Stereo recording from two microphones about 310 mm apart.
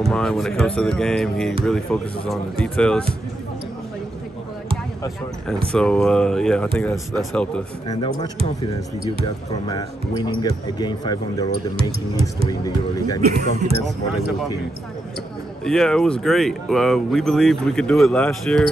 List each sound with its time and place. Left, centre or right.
0.0 s speech: centre
5.7 s speech: centre
13.2 s speech: right
15.6 s speech: centre